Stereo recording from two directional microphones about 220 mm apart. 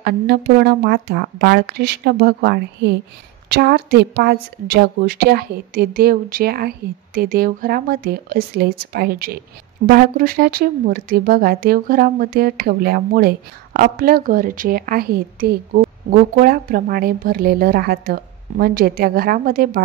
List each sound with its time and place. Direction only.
0.0 s speech: 50° right (ahead or behind)